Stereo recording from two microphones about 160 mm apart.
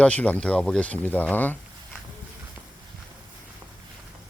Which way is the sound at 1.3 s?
10° left (ahead or behind).